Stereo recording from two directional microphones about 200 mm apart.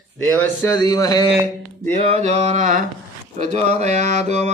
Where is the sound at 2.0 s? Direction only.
30° right (ahead or behind).